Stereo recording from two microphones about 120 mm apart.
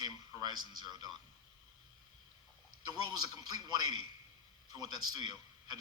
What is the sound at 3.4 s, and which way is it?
Speech, 35° right (ahead or behind).